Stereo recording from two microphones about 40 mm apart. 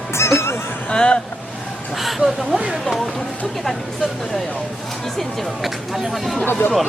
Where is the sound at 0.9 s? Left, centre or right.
Left.